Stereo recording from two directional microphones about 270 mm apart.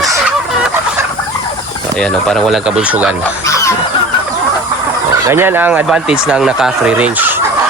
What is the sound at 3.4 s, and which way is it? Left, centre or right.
Fowl, centre.